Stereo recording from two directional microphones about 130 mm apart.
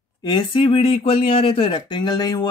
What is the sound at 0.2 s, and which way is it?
Speech, 35° left (ahead or behind).